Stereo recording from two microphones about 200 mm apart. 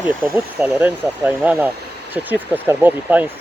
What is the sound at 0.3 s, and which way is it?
Speech, 5° right (ahead or behind).